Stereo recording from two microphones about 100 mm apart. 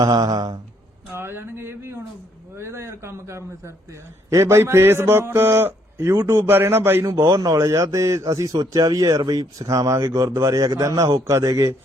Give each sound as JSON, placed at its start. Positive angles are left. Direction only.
{"t": 0.0, "sound": "a man's voice", "side_deg": -40}
{"t": 1.1, "sound": "a man's voice", "side_deg": -25}
{"t": 7.0, "sound": "a man's voice", "side_deg": -35}